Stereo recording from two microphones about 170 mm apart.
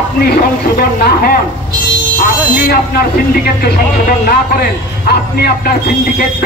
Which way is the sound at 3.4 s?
65° left (ahead or behind).